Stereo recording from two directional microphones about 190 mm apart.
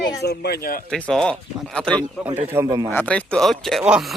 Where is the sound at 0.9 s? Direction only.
5° left (ahead or behind).